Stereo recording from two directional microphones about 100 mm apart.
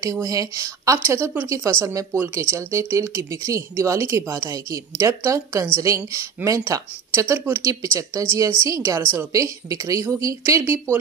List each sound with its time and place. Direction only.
0.0 s speech: 35° right (ahead or behind)
0.9 s speech: 25° right (ahead or behind)